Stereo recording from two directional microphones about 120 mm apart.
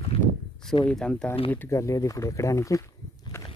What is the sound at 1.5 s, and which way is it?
Speech, 20° left (ahead or behind).